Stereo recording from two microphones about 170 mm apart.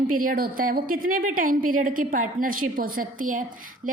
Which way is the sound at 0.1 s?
55° right (ahead or behind).